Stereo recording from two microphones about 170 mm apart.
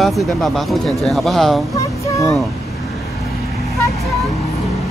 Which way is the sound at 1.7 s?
20° left (ahead or behind).